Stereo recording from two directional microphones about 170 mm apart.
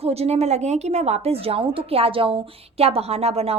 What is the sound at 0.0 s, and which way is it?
A woman's voice, 35° right (ahead or behind).